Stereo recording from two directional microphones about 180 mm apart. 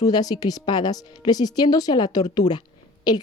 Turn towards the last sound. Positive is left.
turn(degrees=25)  # may be behind; listen again after turning